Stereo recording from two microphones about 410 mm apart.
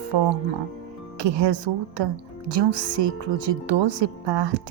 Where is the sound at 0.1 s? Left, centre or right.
Right.